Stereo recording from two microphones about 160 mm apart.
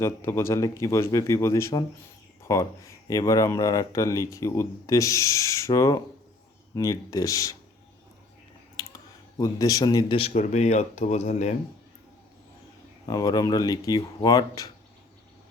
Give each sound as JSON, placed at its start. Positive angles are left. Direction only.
{"t": 0.0, "sound": "speech", "side_deg": 15}
{"t": 8.7, "sound": "clicking", "side_deg": 25}
{"t": 9.4, "sound": "speech", "side_deg": 20}
{"t": 13.1, "sound": "speech", "side_deg": 25}